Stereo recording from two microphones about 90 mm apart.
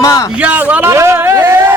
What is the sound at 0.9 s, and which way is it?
Speech, 30° right (ahead or behind).